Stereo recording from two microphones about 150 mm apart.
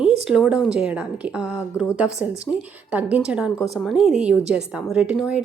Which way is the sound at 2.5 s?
15° left (ahead or behind).